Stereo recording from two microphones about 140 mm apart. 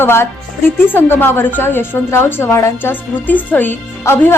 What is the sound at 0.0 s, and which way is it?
Speech, 15° left (ahead or behind).